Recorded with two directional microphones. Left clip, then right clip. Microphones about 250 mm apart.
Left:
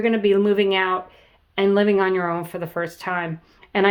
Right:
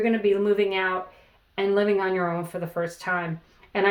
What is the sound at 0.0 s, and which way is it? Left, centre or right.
Speech, left.